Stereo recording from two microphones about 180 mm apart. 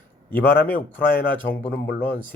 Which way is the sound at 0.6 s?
10° left (ahead or behind).